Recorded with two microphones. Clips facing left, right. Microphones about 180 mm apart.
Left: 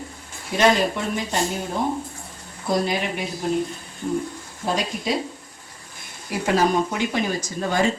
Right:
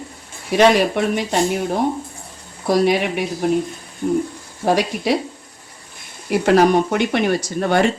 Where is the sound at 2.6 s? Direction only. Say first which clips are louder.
Right 6 dB; 75° right (ahead or behind).